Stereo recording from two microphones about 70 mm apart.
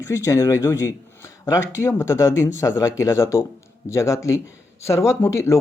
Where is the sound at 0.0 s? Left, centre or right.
Left.